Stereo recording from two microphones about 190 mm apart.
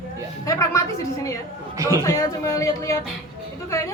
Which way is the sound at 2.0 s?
15° left (ahead or behind).